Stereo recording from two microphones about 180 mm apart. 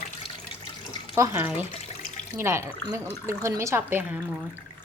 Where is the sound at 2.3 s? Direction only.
15° right (ahead or behind).